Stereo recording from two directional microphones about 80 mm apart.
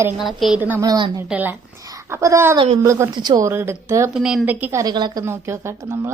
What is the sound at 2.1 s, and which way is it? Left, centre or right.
Speech, right.